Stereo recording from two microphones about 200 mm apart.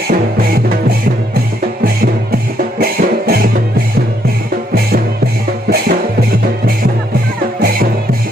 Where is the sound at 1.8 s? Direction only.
45° right (ahead or behind).